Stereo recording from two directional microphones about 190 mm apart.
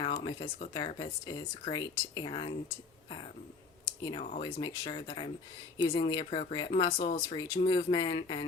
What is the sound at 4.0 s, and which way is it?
Speech, 30° left (ahead or behind).